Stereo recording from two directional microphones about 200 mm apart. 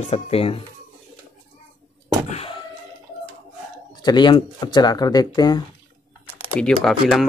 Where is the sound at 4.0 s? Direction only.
20° left (ahead or behind).